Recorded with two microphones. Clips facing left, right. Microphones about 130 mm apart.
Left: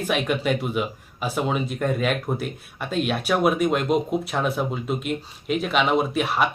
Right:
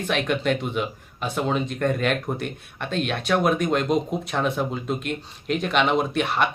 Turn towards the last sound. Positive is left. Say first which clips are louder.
# left 1 dB
turn(degrees=0)  # may be behind; listen again after turning